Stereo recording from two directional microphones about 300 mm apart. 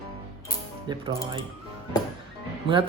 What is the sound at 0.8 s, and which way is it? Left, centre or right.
Speech, centre.